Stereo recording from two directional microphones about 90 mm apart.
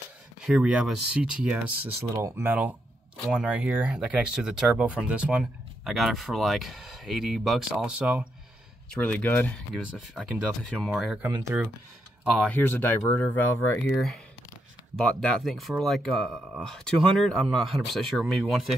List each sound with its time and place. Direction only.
0.4 s speech: 10° right (ahead or behind)
2.1 s speech: 35° right (ahead or behind)
2.4 s speech: 20° right (ahead or behind); by 7.8 s centre (ahead or behind)
7.8 s speech: 15° right (ahead or behind)
9.0 s speech: 20° left (ahead or behind)
10.1 s speech: 5° left (ahead or behind)
11.2 s speech: 15° right (ahead or behind)
12.4 s speech: 20° left (ahead or behind); by 18.7 s centre (ahead or behind)